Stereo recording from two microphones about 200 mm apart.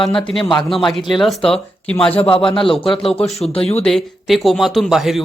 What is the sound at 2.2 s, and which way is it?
Speech, 30° left (ahead or behind).